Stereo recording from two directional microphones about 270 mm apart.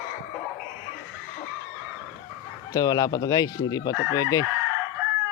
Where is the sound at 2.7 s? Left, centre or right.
Centre.